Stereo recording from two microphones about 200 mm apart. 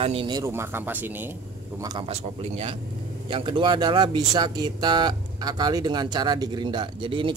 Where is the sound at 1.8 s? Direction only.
20° right (ahead or behind).